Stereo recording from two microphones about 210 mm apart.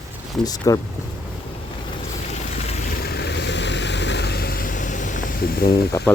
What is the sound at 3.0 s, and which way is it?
Vehicle, 50° left (ahead or behind).